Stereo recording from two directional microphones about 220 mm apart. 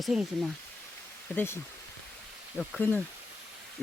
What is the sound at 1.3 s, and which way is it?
Speech, 10° left (ahead or behind).